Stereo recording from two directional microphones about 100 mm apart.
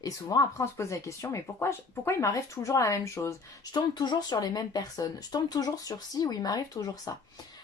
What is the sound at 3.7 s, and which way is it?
A woman's voice, 45° left (ahead or behind).